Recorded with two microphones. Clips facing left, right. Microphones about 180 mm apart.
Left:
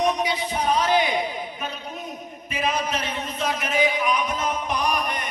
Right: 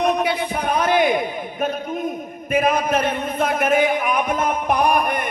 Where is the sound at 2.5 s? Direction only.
55° right (ahead or behind).